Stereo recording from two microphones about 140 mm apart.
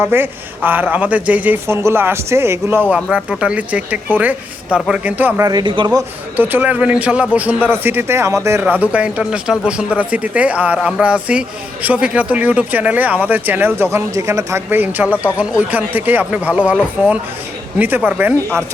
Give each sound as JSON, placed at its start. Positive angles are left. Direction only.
{"t": 0.0, "sound": "speech", "side_deg": -15}
{"t": 5.5, "sound": "a man's voice", "side_deg": -30}
{"t": 6.3, "sound": "speech", "side_deg": -15}